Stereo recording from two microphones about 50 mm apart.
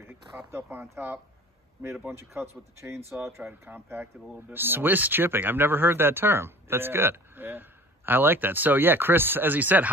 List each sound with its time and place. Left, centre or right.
0.5 s speech: right
2.0 s speech: right
3.6 s speech: right